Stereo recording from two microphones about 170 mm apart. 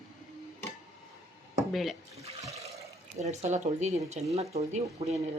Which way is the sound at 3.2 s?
40° right (ahead or behind).